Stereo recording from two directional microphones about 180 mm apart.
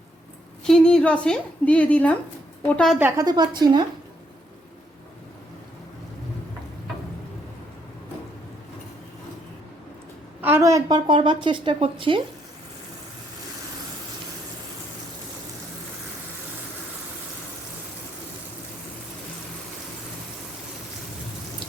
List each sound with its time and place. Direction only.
0.6 s a woman's voice: 5° left (ahead or behind)
3.0 s a woman's voice: 15° right (ahead or behind)
10.4 s a woman's voice: 15° right (ahead or behind)